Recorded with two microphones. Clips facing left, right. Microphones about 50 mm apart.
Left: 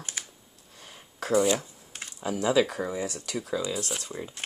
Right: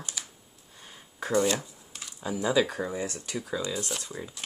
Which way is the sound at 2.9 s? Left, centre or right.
Left.